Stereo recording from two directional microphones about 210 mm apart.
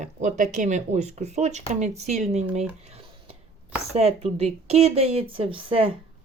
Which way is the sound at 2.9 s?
30° right (ahead or behind).